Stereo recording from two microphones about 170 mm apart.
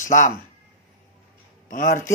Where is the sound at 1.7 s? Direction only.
50° left (ahead or behind).